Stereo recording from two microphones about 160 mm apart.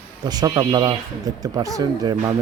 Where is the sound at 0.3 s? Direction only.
25° right (ahead or behind).